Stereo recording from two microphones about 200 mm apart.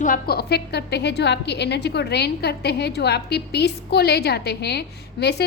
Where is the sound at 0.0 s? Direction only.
45° left (ahead or behind).